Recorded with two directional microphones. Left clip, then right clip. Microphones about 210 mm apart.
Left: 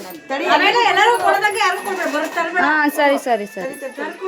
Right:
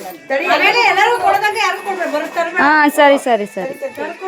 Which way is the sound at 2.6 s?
20° right (ahead or behind).